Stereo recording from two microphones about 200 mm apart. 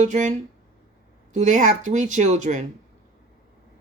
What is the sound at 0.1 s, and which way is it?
Speech, 35° right (ahead or behind).